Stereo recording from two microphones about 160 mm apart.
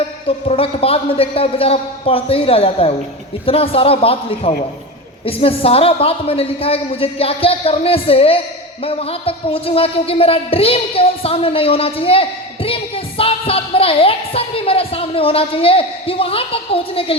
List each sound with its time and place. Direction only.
0.3 s speech: 35° left (ahead or behind)